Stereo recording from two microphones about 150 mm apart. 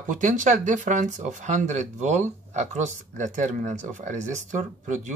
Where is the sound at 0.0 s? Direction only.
60° right (ahead or behind).